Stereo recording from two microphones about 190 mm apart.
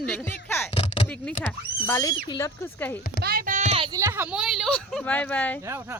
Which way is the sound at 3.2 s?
50° right (ahead or behind).